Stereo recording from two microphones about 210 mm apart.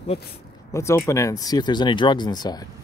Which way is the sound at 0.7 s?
15° left (ahead or behind).